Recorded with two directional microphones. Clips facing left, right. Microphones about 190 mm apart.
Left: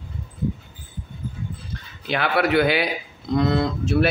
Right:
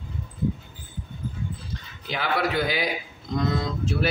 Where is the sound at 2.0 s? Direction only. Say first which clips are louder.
Left 5 dB; 65° left (ahead or behind).